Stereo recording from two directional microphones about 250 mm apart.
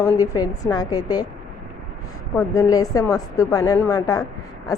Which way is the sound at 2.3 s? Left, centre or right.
Centre.